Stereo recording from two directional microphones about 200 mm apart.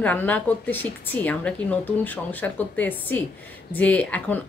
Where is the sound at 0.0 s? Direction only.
10° left (ahead or behind).